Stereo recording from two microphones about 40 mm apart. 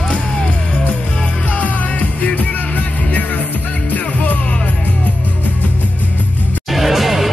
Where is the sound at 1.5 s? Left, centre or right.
Left.